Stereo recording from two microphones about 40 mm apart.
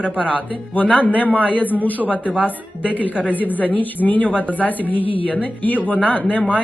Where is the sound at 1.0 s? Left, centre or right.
Left.